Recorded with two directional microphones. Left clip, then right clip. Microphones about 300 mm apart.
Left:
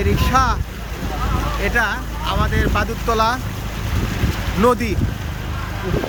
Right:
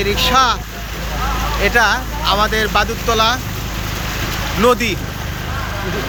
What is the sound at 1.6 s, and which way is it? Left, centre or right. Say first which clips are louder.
Speech: right 6 dB; centre.